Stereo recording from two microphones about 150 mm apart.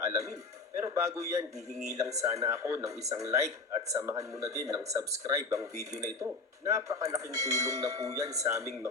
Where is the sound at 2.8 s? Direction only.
45° right (ahead or behind).